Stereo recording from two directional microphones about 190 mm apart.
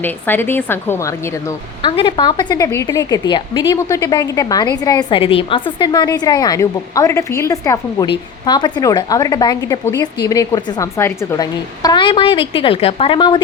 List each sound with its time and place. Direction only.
0.0 s a woman's voice: 10° left (ahead or behind)
2.0 s a woman's voice: 25° left (ahead or behind)